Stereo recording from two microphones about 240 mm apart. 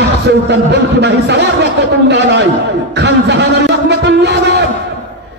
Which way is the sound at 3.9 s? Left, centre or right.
Right.